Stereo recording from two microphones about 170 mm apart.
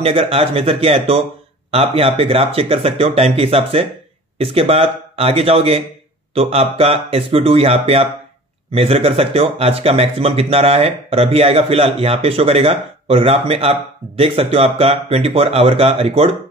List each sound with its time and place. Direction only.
0.0 s speech: 35° right (ahead or behind)